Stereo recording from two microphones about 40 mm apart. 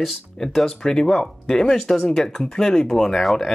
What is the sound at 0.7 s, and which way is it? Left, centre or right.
Speech, centre.